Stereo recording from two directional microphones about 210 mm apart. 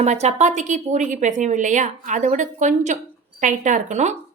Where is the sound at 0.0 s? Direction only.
30° right (ahead or behind).